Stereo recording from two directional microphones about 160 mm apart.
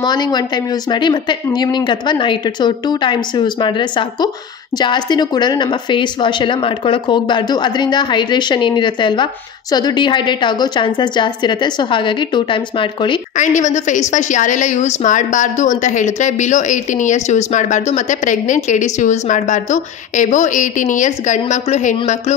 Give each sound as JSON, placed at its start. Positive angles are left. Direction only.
{"t": 0.0, "sound": "a woman's voice", "side_deg": 25}
{"t": 4.7, "sound": "a woman's voice", "side_deg": 25}
{"t": 13.4, "sound": "a woman's voice", "side_deg": 50}